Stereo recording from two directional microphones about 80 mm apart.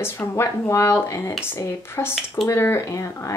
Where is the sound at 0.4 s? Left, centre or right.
Left.